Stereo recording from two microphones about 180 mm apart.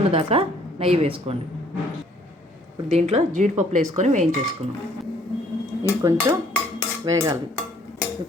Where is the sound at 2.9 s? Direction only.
40° right (ahead or behind).